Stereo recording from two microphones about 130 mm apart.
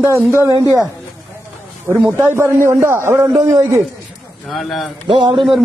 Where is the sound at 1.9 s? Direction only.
20° right (ahead or behind).